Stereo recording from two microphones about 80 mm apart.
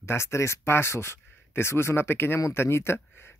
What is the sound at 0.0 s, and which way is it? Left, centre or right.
Speech, left.